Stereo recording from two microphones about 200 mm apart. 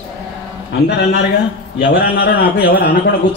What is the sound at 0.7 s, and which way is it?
A man's voice, 55° left (ahead or behind).